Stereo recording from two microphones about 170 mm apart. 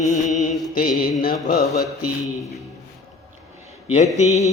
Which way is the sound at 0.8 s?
55° left (ahead or behind).